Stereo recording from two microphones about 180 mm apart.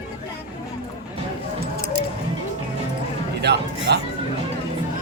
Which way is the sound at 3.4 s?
70° right (ahead or behind).